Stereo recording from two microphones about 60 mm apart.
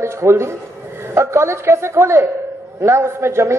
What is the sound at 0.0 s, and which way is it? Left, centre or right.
A woman's voice, right.